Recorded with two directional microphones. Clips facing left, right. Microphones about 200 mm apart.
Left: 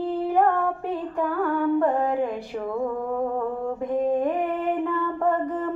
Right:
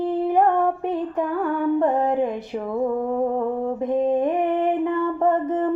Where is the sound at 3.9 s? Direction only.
20° right (ahead or behind).